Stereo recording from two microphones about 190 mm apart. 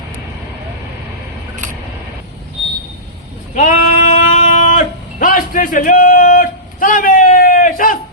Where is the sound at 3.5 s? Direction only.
40° left (ahead or behind).